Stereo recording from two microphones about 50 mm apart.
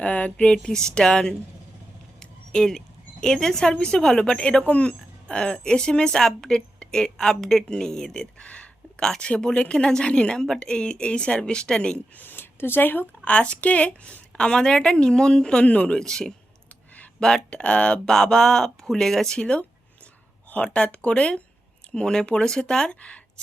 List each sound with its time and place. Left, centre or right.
0.0 s a woman's voice: left; by 1.4 s centre
2.1 s a sound: centre
3.7 s a woman's voice: centre
12.1 s speech: left
13.2 s a woman's voice: left
15.6 s speech: left
16.0 s a woman's voice: centre
17.5 s speech: left
18.1 s a woman's voice: centre
19.4 s a woman's voice: centre